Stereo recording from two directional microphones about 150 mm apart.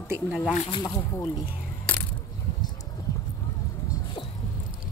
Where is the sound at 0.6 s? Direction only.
30° left (ahead or behind).